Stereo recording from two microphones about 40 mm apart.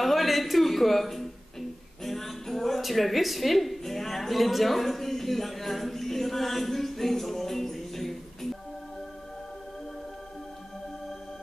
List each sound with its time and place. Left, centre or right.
0.0 s a man's voice: centre